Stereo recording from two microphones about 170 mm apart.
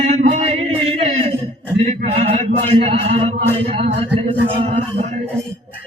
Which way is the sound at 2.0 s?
40° right (ahead or behind).